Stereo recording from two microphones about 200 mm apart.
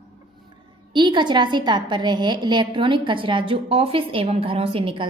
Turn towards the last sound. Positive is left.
turn(degrees=-25)  # may be behind; listen again after turning